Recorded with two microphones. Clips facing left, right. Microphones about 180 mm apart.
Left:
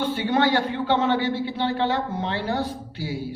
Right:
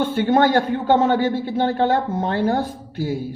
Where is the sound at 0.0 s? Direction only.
50° right (ahead or behind).